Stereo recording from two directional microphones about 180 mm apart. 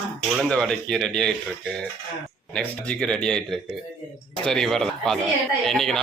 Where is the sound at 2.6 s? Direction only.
5° left (ahead or behind).